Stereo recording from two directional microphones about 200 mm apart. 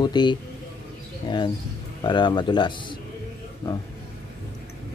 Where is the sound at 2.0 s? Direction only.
25° left (ahead or behind).